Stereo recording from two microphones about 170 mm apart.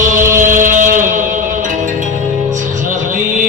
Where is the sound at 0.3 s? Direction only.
50° right (ahead or behind).